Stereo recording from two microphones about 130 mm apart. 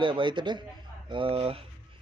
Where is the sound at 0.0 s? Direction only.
40° right (ahead or behind).